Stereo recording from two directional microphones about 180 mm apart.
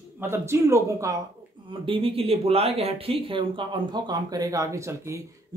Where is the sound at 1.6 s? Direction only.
30° right (ahead or behind).